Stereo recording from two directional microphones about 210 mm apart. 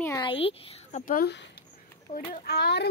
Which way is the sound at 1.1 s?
50° left (ahead or behind).